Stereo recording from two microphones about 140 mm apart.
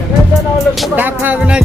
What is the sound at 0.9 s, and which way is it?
Speech, 10° right (ahead or behind).